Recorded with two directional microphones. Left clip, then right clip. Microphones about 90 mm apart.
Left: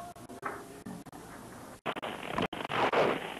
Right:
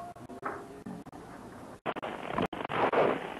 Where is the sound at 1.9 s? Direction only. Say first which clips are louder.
Right 1 dB; 25° left (ahead or behind).